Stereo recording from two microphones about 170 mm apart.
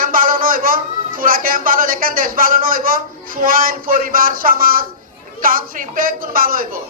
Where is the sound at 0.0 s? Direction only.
55° right (ahead or behind).